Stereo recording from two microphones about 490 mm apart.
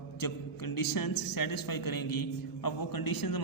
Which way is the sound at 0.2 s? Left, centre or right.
Left.